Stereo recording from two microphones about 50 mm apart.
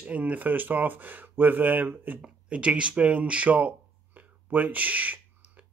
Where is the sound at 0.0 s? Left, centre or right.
Right.